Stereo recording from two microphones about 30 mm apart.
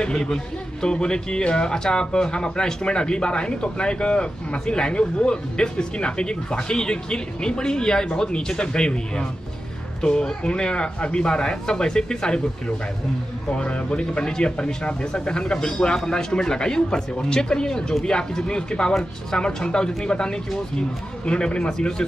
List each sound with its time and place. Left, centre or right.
0.0 s speech: left
21.5 s speech: left